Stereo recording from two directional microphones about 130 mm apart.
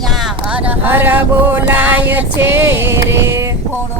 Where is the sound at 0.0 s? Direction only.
Centre (ahead or behind); by 3.8 s 20° right (ahead or behind).